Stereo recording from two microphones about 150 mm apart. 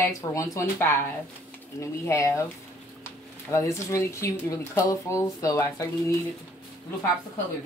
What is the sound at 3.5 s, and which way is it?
Speech, 20° left (ahead or behind).